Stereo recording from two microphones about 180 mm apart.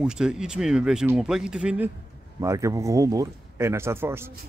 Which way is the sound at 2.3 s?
15° right (ahead or behind).